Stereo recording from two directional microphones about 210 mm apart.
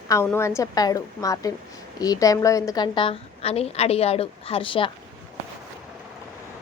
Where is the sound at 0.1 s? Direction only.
10° left (ahead or behind).